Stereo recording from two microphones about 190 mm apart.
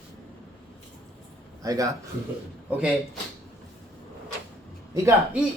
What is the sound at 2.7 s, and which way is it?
Speech, 5° right (ahead or behind).